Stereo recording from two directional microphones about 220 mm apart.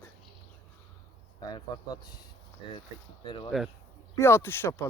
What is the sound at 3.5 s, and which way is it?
Speech, centre (ahead or behind).